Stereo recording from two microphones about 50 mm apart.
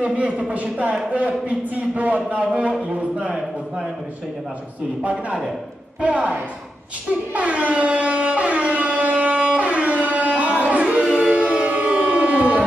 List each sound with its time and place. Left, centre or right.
0.0 s a man's voice: right
5.0 s a man's voice: right
7.3 s siren: right
11.1 s music: right